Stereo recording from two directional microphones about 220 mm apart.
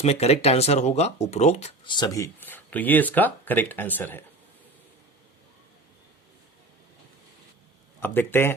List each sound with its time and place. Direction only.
0.0 s speech: 30° left (ahead or behind); by 4.2 s 10° left (ahead or behind)
8.0 s speech: 10° left (ahead or behind)